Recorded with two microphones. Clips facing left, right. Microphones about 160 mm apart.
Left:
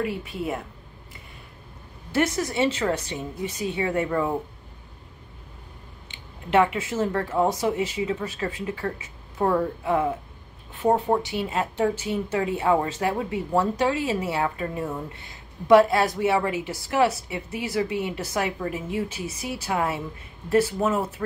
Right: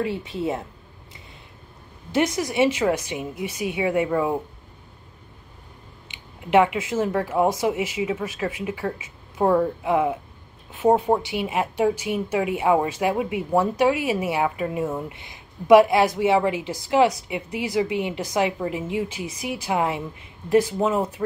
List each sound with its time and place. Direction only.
0.0 s speech: 25° right (ahead or behind)
2.1 s a woman's voice: 15° right (ahead or behind)
6.5 s a woman's voice: 15° right (ahead or behind)